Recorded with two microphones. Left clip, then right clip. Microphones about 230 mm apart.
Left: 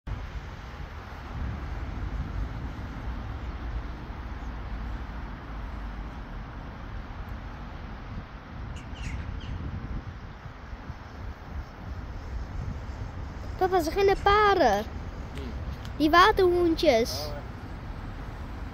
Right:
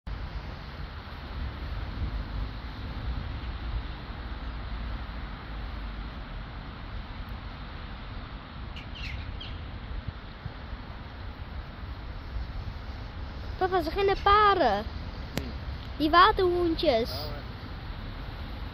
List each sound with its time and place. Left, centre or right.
13.6 s speech: left
16.0 s speech: left